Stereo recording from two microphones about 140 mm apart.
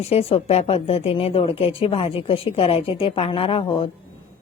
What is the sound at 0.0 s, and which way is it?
A woman's voice, 45° left (ahead or behind).